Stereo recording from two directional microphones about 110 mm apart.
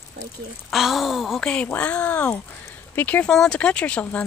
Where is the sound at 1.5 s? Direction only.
10° left (ahead or behind).